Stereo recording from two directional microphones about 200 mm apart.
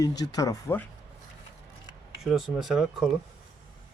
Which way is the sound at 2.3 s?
Centre (ahead or behind).